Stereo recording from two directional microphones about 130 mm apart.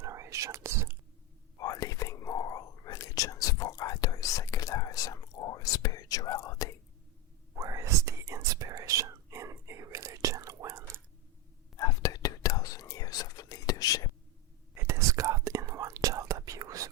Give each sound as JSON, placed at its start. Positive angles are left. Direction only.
{"t": 0.0, "sound": "whispering", "side_deg": -25}
{"t": 1.5, "sound": "whispering", "side_deg": 25}
{"t": 7.5, "sound": "whispering", "side_deg": -25}
{"t": 11.8, "sound": "whispering", "side_deg": 25}
{"t": 14.8, "sound": "whispering", "side_deg": -20}